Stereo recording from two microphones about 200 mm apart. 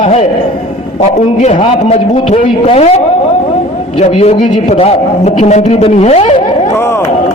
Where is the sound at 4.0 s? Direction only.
35° left (ahead or behind).